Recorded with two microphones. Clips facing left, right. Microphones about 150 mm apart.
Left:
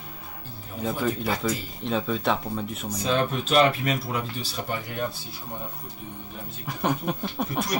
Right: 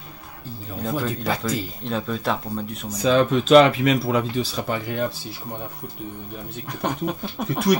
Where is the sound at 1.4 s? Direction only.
Centre (ahead or behind).